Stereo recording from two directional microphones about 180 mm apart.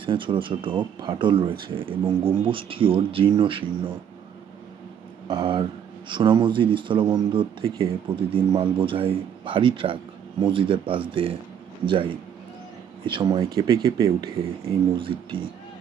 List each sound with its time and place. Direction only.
0.0 s speech: 25° right (ahead or behind)
5.3 s speech: 25° right (ahead or behind)
13.1 s speech: 25° right (ahead or behind)
14.6 s speech: 30° right (ahead or behind)